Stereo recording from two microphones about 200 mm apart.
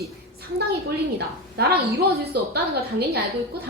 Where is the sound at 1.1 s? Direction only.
55° right (ahead or behind).